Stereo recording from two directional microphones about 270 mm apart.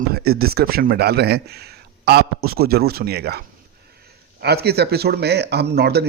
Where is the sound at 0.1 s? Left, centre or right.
Right.